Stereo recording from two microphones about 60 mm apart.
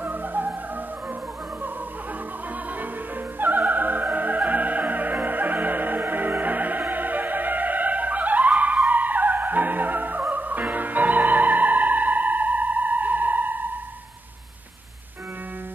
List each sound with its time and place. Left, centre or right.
0.0 s music: right
3.3 s music: right